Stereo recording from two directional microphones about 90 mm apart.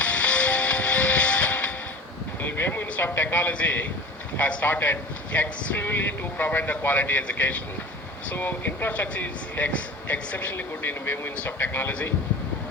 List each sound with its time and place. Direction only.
0.0 s music: 15° left (ahead or behind)
2.4 s vehicle: 20° left (ahead or behind)
4.4 s speech: 20° left (ahead or behind)